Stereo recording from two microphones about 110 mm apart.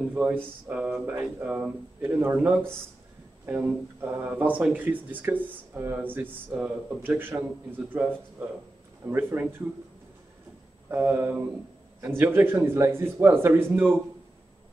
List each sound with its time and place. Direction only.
0.1 s speech: 15° right (ahead or behind)
9.0 s speech: 15° right (ahead or behind)
10.9 s speech: 20° right (ahead or behind)